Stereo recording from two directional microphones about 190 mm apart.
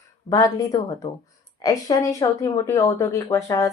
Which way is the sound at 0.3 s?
20° left (ahead or behind).